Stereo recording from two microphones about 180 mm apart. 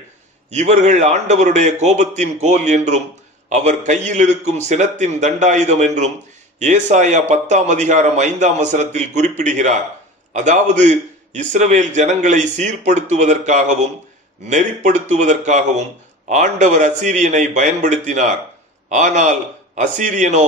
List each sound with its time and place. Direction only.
0.5 s a man's voice: 40° right (ahead or behind)